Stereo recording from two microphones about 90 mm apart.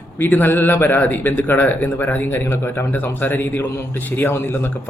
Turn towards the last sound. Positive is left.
turn(degrees=25)  # may be behind; listen again after turning